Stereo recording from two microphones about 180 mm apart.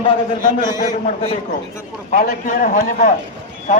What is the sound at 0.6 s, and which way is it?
Speech, 20° left (ahead or behind).